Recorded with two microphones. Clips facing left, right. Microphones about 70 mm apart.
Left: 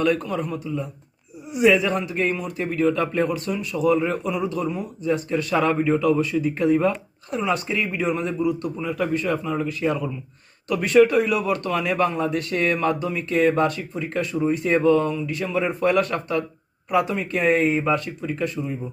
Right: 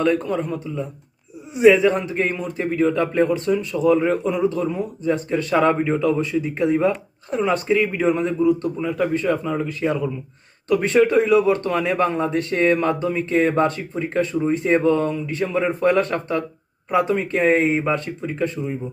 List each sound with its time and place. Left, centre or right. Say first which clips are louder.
0.0 s speech: right 2 dB; right
4.2 s speech: right 4 dB; right
7.3 s speech: right 5 dB; right